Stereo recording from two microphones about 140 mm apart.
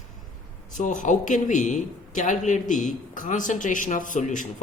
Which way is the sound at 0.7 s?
65° left (ahead or behind).